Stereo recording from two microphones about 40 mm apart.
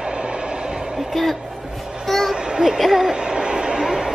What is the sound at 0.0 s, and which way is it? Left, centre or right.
Train, right.